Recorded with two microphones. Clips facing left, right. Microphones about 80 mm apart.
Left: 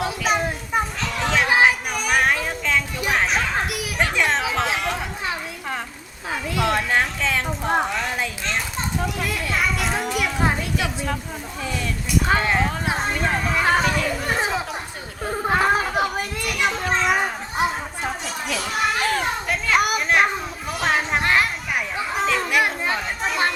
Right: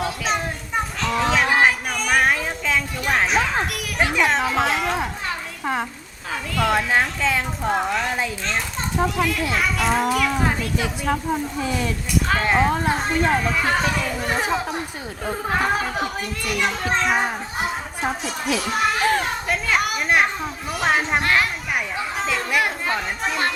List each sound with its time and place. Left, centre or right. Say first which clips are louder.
0.0 s children playing: left 2 dB; centre
1.0 s a sound: right 6 dB; centre
4.0 s chatter: right 2 dB; centre
6.3 s a child's voice: right 1 dB; centre
12.3 s a child's voice: right 3 dB; centre